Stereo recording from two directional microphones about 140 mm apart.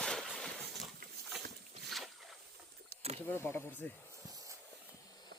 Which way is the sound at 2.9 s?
90° right.